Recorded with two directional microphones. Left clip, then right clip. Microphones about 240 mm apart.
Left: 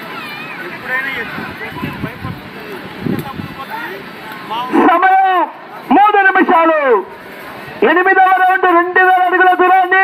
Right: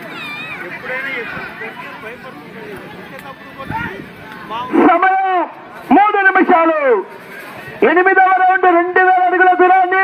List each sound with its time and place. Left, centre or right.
0.9 s vehicle: left
4.5 s livestock: left
5.9 s a sound: left